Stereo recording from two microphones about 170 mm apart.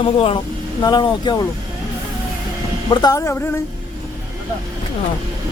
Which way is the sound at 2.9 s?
25° left (ahead or behind).